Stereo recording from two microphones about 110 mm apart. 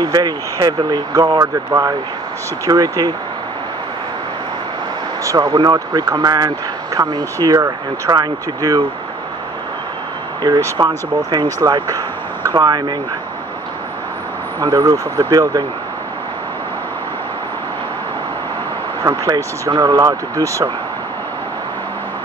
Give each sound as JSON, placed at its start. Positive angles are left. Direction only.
{"t": 0.0, "sound": "speech", "side_deg": -40}
{"t": 5.2, "sound": "speech", "side_deg": -30}
{"t": 10.8, "sound": "speech", "side_deg": -40}
{"t": 14.6, "sound": "speech", "side_deg": -30}
{"t": 19.0, "sound": "speech", "side_deg": -35}